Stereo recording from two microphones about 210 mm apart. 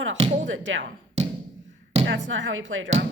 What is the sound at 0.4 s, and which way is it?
Speech, 65° right (ahead or behind).